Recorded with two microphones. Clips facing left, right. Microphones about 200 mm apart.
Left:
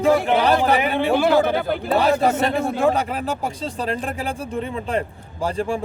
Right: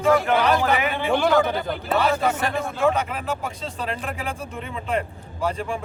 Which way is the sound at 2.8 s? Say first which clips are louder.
Right 1 dB; 35° left (ahead or behind).